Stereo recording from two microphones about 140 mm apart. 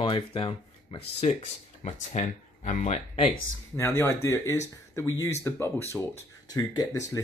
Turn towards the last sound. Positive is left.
turn(degrees=30)  # may be behind; listen again after turning